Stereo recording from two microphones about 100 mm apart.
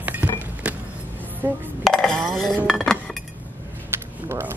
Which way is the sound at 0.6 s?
15° right (ahead or behind).